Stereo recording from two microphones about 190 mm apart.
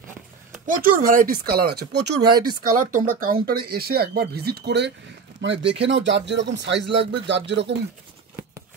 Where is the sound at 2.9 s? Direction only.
50° right (ahead or behind); by 7.7 s 65° right (ahead or behind).